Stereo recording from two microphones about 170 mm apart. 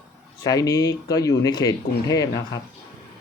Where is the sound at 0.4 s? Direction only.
20° left (ahead or behind).